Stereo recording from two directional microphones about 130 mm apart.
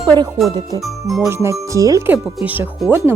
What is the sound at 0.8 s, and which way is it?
Speech, centre (ahead or behind).